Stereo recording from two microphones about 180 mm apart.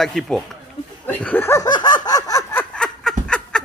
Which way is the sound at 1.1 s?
10° left (ahead or behind).